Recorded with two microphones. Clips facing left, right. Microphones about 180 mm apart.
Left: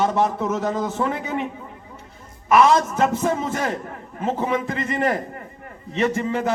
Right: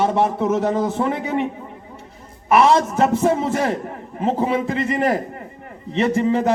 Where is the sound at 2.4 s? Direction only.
30° right (ahead or behind).